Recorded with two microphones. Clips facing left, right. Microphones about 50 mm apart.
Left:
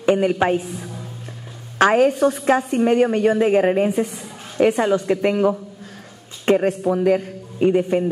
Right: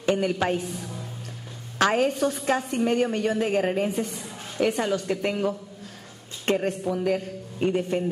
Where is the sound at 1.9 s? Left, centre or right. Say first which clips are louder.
Left 7 dB; centre.